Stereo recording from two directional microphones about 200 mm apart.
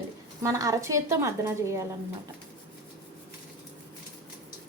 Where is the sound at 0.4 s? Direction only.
15° right (ahead or behind).